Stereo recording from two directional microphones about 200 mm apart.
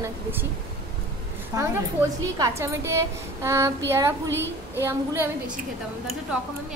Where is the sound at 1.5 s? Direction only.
15° right (ahead or behind).